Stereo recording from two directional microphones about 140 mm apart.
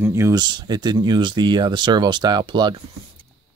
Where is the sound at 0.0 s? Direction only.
20° right (ahead or behind).